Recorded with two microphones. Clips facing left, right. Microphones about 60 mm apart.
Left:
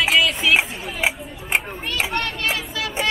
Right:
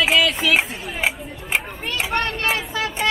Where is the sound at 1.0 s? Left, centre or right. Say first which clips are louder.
Even; centre.